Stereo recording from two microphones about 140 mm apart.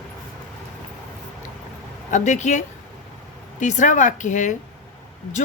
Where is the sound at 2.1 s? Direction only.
60° left (ahead or behind).